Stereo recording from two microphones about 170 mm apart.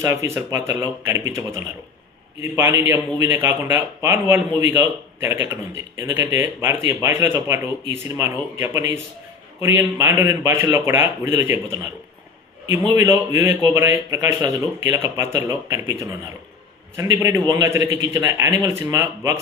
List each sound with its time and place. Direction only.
0.3 s a man's voice: 15° right (ahead or behind)
12.9 s a man's voice: 15° right (ahead or behind)